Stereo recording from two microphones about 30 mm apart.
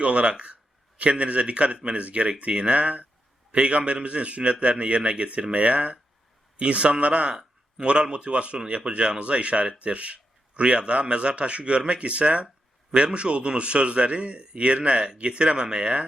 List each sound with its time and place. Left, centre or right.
0.0 s a man's voice: right
3.5 s a man's voice: right
8.5 s speech: right
12.9 s speech: right